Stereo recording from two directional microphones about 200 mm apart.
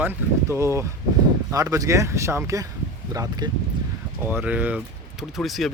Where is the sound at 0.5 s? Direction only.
15° right (ahead or behind).